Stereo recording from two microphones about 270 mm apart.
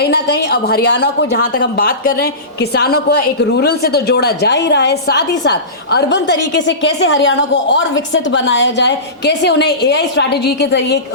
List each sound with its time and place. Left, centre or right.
0.0 s a woman's voice: left